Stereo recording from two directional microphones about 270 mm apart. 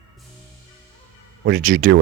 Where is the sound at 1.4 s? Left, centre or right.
Right.